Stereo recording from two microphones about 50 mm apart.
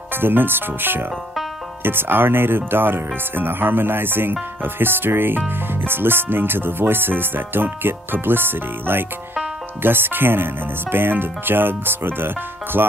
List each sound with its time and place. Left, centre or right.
0.1 s speech: right